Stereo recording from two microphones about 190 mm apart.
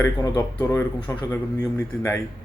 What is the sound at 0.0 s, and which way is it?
Speech, 15° left (ahead or behind).